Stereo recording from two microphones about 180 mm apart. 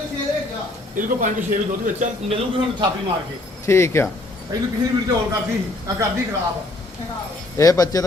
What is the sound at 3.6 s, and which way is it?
Speech, 15° left (ahead or behind).